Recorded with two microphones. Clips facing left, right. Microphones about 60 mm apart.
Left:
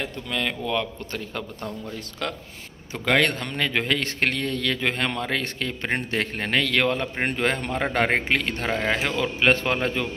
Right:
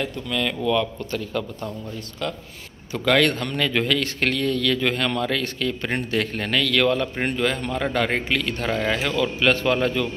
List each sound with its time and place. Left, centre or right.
0.0 s a man's voice: left
2.9 s a man's voice: left